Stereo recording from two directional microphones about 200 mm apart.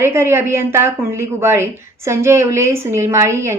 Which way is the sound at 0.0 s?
15° right (ahead or behind).